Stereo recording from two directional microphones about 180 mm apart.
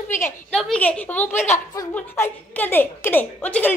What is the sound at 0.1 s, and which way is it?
A woman's voice, 10° left (ahead or behind).